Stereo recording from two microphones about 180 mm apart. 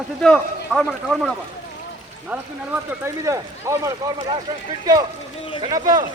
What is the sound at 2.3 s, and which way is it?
Speech, 10° right (ahead or behind).